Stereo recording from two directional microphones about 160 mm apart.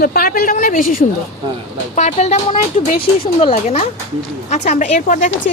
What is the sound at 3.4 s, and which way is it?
Speech, 40° left (ahead or behind).